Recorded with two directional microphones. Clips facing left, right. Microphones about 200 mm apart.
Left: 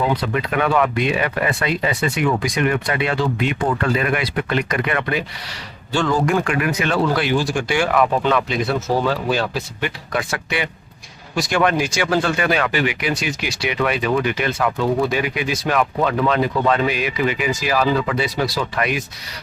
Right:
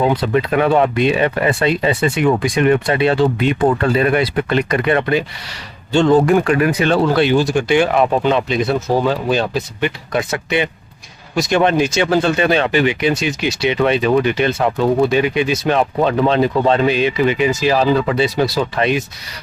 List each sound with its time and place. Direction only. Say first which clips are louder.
0.2 s speech: right 5 dB; 30° right (ahead or behind)